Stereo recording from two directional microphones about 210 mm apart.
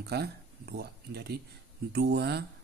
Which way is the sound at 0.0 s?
50° right (ahead or behind).